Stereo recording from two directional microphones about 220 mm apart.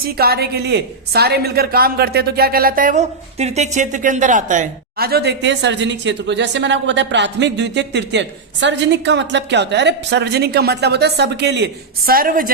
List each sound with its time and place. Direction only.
0.0 s a woman's voice: 45° right (ahead or behind)